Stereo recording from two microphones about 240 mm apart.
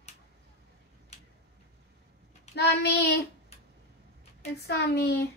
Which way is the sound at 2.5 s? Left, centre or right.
Left.